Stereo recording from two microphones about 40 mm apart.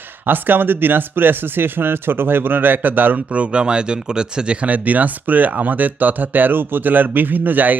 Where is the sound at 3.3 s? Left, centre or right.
Right.